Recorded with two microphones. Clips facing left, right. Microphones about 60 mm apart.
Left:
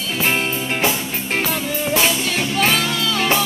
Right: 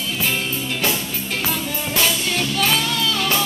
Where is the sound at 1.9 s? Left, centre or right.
Left.